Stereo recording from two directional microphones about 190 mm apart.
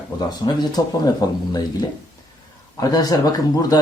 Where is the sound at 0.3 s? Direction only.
20° left (ahead or behind).